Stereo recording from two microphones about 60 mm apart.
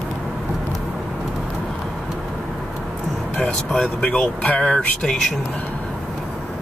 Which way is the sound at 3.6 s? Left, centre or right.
Centre.